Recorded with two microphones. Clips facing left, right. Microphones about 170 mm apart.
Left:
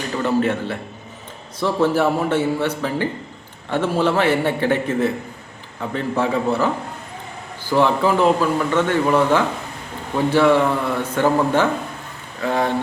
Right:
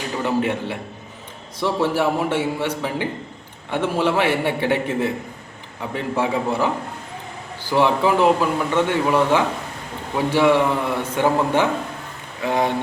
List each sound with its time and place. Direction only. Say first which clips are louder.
0.2 s a man's voice: left 2 dB; 15° right (ahead or behind)
7.7 s a man's voice: left 1 dB; 15° right (ahead or behind)